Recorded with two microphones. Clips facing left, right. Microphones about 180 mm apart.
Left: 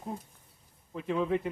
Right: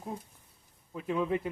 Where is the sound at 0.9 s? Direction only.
Centre (ahead or behind).